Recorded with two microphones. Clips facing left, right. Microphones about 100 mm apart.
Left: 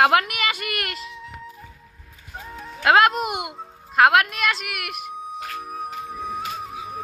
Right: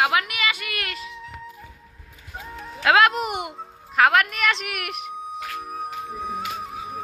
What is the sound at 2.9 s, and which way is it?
Speech, 30° left (ahead or behind).